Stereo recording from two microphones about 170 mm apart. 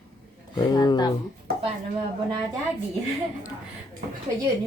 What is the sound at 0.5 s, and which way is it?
Speech, 25° left (ahead or behind).